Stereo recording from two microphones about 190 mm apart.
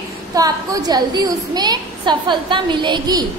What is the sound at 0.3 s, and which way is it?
A woman's voice, 20° right (ahead or behind).